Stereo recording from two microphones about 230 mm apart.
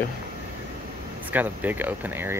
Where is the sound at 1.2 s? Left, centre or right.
Centre.